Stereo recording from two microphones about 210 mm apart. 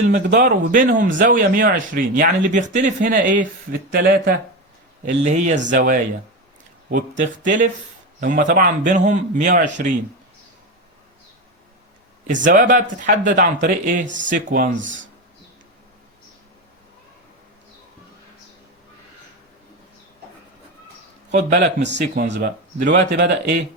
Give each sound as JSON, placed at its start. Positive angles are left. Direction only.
{"t": 0.1, "sound": "speech", "side_deg": -40}
{"t": 12.5, "sound": "speech", "side_deg": -40}
{"t": 14.8, "sound": "speech", "side_deg": -60}
{"t": 21.2, "sound": "speech", "side_deg": -55}